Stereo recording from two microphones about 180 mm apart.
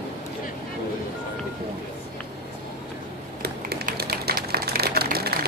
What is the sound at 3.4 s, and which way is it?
Typewriter, 60° right (ahead or behind).